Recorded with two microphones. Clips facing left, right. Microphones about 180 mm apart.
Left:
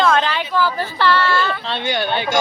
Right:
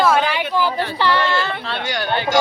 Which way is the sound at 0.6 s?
15° right (ahead or behind).